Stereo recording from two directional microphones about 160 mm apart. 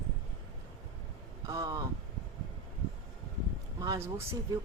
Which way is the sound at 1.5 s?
25° right (ahead or behind).